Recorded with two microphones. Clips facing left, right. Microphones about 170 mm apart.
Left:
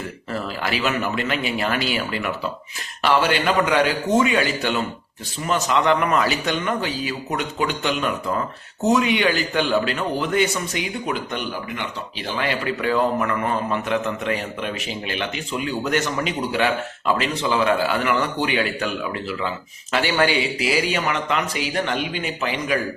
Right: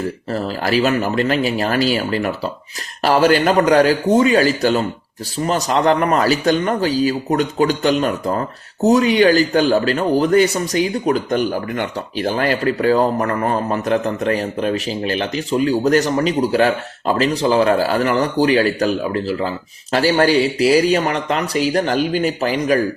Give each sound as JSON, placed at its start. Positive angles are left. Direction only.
{"t": 0.3, "sound": "speech", "side_deg": -40}